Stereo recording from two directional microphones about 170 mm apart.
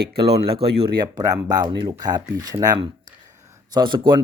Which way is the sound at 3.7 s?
25° right (ahead or behind).